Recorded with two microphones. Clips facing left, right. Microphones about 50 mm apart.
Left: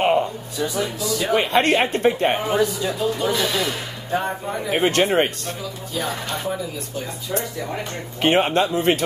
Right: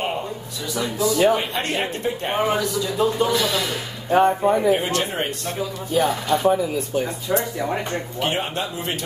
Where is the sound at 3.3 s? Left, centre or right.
Centre.